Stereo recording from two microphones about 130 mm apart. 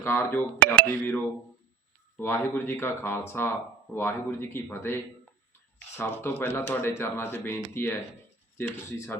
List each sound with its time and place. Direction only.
0.0 s speech: 20° left (ahead or behind)
6.0 s speech: 15° left (ahead or behind)